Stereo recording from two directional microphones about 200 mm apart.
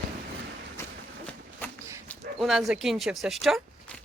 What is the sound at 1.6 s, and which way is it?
Dog, 10° left (ahead or behind).